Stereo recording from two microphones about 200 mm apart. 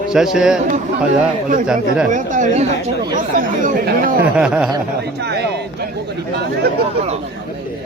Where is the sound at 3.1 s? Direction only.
40° right (ahead or behind).